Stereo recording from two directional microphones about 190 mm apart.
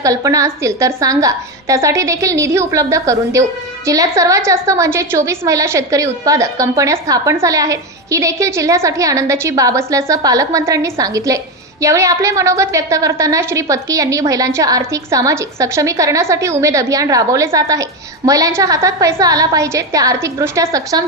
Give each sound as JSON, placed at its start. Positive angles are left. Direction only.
{"t": 0.0, "sound": "a woman's voice", "side_deg": -15}